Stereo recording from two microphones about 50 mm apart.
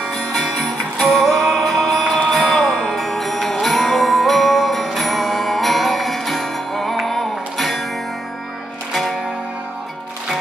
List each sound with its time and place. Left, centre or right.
0.0 s music: centre
2.0 s music: left
2.5 s music: centre